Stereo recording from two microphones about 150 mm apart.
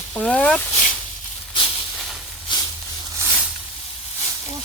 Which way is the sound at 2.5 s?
30° left (ahead or behind).